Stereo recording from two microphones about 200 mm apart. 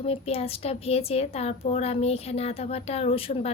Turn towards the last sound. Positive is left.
turn(degrees=30)  # may be behind; listen again after turning